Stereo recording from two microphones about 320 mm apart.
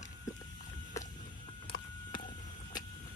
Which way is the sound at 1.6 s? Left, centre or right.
Centre.